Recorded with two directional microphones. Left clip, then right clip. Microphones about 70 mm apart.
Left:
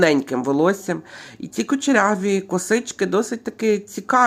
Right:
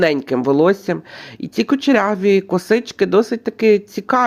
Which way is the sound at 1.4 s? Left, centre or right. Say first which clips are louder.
Right 5 dB; right.